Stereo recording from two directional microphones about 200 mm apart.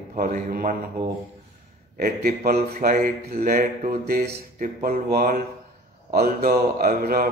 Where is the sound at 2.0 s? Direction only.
50° right (ahead or behind).